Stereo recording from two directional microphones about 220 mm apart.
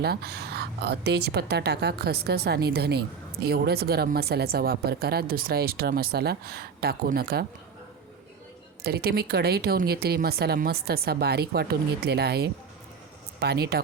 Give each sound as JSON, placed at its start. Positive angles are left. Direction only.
{"t": 0.0, "sound": "a woman's voice", "side_deg": -45}
{"t": 8.8, "sound": "a woman's voice", "side_deg": -45}